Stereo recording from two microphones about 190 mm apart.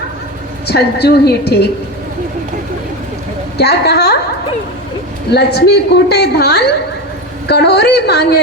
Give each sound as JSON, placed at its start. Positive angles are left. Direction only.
{"t": 0.7, "sound": "a woman's voice", "side_deg": 60}
{"t": 3.6, "sound": "a woman's voice", "side_deg": 60}
{"t": 5.3, "sound": "a woman's voice", "side_deg": 60}